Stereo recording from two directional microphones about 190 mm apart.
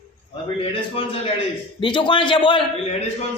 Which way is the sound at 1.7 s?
25° left (ahead or behind).